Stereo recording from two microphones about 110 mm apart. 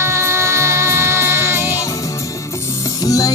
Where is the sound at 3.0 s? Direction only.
30° left (ahead or behind).